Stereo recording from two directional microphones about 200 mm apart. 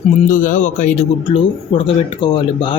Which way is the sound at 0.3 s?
40° left (ahead or behind).